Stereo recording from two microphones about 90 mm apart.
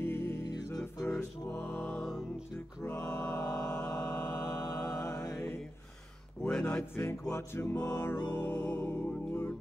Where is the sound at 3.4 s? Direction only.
40° left (ahead or behind).